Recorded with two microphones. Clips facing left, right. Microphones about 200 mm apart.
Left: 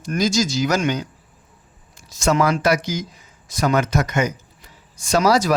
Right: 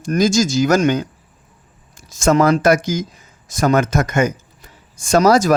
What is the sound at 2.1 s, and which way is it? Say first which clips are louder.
Speech: right 5 dB; 50° right (ahead or behind).